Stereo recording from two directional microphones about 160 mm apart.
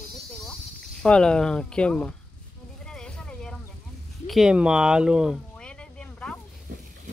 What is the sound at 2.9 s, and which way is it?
Vehicle, 5° left (ahead or behind).